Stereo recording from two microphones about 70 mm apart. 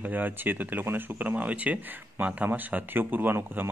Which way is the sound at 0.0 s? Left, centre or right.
Right.